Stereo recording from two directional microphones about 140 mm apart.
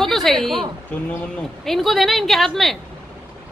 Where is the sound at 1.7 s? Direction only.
Centre (ahead or behind).